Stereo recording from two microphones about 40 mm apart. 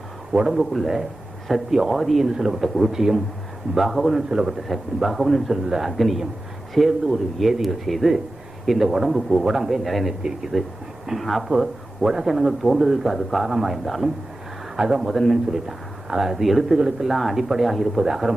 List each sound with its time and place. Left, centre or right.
0.3 s a man's voice: centre
2.2 s a man's voice: centre
2.6 s a man's voice: centre
11.2 s a man's voice: centre
14.8 s a man's voice: centre
15.1 s speech: centre
15.5 s speech: centre
16.7 s a man's voice: centre
17.1 s speech: centre
18.0 s a man's voice: centre